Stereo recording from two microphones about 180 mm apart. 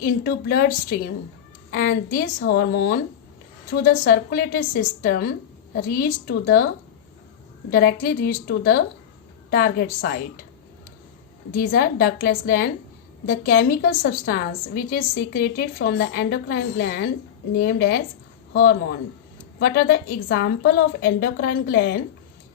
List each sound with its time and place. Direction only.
0.0 s a woman's voice: 55° left (ahead or behind)
7.7 s a woman's voice: 55° left (ahead or behind)
11.5 s a woman's voice: 50° left (ahead or behind)